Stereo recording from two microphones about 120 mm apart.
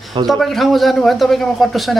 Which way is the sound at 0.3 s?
Centre (ahead or behind).